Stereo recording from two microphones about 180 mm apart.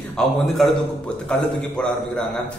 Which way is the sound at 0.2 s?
5° left (ahead or behind).